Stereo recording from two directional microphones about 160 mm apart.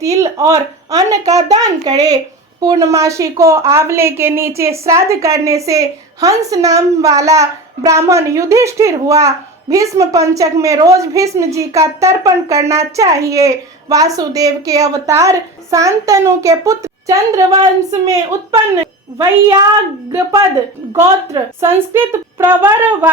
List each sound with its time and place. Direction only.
0.2 s a woman's voice: 20° right (ahead or behind)
20.9 s a woman's voice: 15° right (ahead or behind)